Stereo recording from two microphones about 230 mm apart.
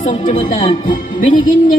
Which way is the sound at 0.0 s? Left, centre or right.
Left.